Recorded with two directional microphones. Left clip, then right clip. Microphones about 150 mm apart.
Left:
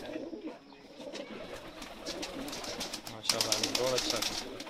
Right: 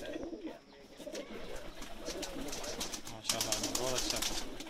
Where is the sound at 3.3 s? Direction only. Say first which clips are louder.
Left 5 dB; 35° left (ahead or behind).